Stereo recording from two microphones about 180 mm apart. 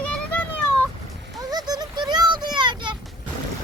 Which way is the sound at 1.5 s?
20° right (ahead or behind).